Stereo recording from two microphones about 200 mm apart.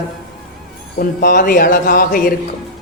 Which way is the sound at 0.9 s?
45° left (ahead or behind).